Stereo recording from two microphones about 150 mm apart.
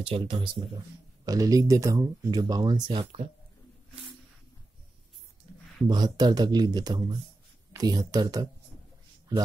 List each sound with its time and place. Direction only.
0.0 s speech: 35° right (ahead or behind)
5.9 s speech: 30° right (ahead or behind)